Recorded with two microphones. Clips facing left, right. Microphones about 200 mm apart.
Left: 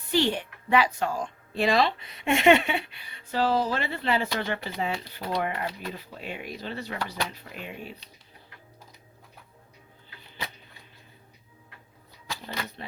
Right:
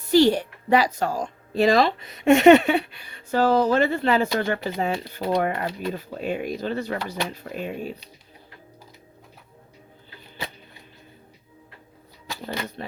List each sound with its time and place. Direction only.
0.0 s a woman's voice: 40° right (ahead or behind)